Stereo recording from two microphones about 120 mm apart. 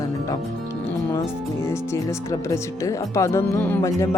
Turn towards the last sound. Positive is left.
turn(degrees=15)  # may be behind; listen again after turning